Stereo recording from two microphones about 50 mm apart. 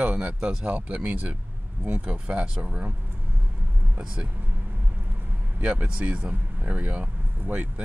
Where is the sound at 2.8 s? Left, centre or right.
Right.